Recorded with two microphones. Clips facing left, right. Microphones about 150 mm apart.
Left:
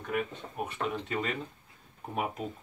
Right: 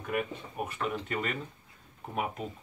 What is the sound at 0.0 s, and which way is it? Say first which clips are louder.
Speech: even; 5° right (ahead or behind).